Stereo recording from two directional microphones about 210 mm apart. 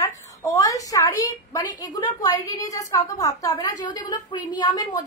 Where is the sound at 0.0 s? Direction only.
15° left (ahead or behind).